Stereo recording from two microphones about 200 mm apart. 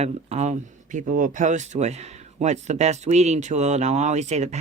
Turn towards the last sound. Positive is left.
turn(degrees=-35)  # may be behind; listen again after turning